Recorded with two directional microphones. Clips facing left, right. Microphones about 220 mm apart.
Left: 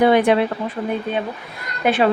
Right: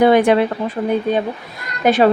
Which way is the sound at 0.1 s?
45° right (ahead or behind).